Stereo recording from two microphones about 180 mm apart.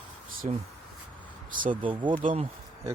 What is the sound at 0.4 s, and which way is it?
Speech, 35° right (ahead or behind).